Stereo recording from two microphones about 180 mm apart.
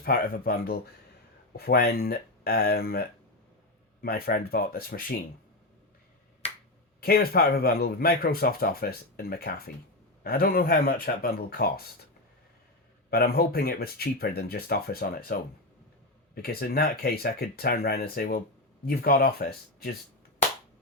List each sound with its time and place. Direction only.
0.0 s speech: 55° left (ahead or behind)
4.0 s speech: 55° left (ahead or behind)
7.0 s speech: 55° left (ahead or behind)
13.1 s speech: 60° left (ahead or behind)